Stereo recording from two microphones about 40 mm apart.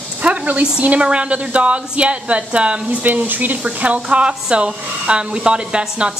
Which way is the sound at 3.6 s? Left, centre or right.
Right.